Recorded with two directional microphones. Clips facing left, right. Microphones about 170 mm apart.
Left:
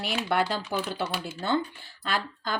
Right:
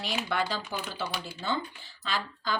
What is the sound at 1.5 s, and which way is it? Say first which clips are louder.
A woman's voice: left 6 dB; 60° left (ahead or behind).